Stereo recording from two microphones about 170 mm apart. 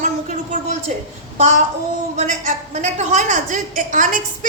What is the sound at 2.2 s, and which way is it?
A woman's voice, 45° right (ahead or behind).